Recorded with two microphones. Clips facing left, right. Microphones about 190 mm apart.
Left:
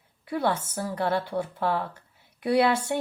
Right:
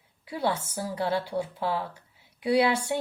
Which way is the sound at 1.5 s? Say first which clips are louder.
Left 2 dB; 55° left (ahead or behind).